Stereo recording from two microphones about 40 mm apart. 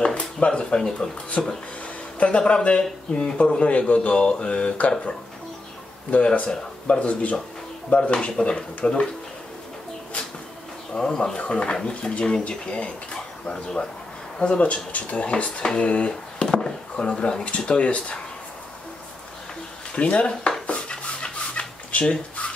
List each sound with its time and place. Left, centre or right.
0.0 s a sound: left
1.4 s speech: left
6.0 s speech: left
10.9 s speech: centre
16.4 s speech: centre
20.0 s speech: left
20.6 s dishes: left